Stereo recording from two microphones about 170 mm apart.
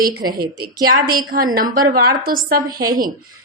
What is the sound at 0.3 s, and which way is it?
A woman's voice, 60° right (ahead or behind).